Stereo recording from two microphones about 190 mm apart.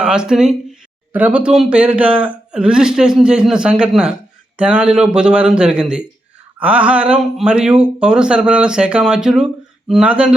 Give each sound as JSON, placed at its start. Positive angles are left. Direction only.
{"t": 0.0, "sound": "speech", "side_deg": -5}